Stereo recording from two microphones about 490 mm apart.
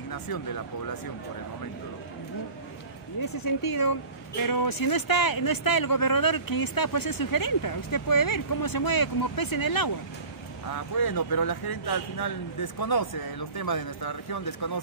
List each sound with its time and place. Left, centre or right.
3.2 s speech: left